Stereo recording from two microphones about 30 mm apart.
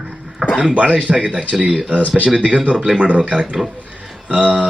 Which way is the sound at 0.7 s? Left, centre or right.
Right.